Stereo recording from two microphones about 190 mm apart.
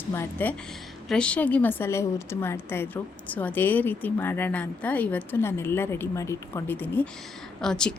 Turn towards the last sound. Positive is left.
turn(degrees=5)  # may be behind; listen again after turning